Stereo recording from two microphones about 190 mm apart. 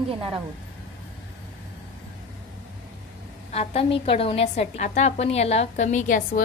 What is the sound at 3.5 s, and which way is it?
A woman's voice, 30° left (ahead or behind).